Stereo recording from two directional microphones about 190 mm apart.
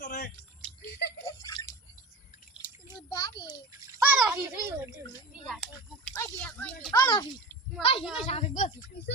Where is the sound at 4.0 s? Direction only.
5° right (ahead or behind).